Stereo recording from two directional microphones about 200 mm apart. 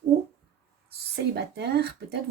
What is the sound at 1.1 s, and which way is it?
Speech, 55° right (ahead or behind).